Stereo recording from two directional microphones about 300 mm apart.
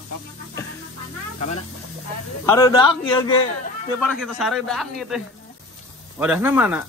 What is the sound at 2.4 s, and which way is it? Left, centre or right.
Speech, centre.